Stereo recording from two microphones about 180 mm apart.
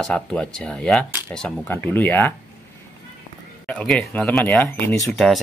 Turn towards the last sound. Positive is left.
turn(degrees=0)  # may be behind; listen again after turning